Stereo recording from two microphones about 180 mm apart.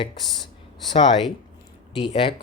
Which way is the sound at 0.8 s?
25° left (ahead or behind).